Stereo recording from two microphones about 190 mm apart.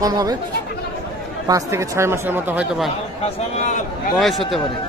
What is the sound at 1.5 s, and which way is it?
Speech, 15° right (ahead or behind).